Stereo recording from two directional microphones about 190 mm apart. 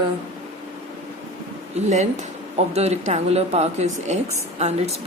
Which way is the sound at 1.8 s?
35° right (ahead or behind).